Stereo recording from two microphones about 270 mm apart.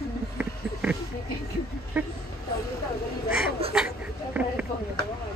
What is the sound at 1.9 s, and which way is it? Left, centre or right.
Vehicle, centre.